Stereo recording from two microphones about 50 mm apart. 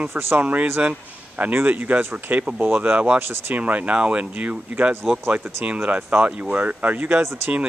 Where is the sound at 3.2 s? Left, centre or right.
Right.